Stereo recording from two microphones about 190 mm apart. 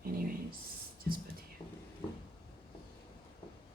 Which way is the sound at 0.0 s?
50° right (ahead or behind).